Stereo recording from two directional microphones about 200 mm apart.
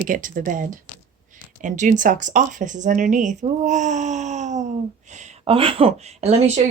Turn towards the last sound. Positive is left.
turn(degrees=-30)  # may be behind; listen again after turning